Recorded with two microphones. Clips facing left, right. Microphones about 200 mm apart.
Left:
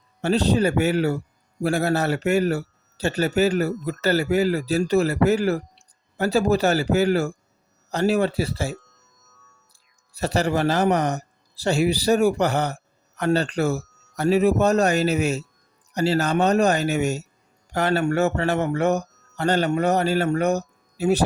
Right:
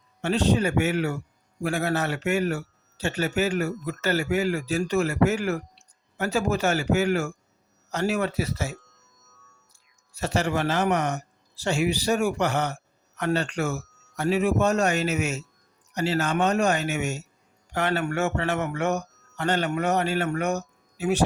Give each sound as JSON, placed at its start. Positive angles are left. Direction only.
{"t": 0.2, "sound": "speech", "side_deg": 35}
{"t": 10.1, "sound": "a man's voice", "side_deg": 35}